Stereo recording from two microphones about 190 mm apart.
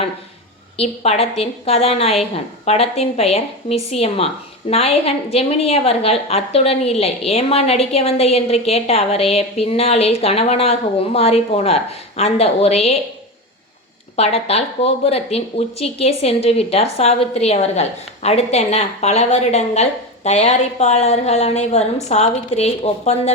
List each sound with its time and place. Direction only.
0.8 s a woman's voice: 30° left (ahead or behind)
14.2 s a woman's voice: 35° left (ahead or behind)